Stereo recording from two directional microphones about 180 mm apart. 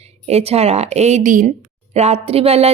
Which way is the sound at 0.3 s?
35° right (ahead or behind).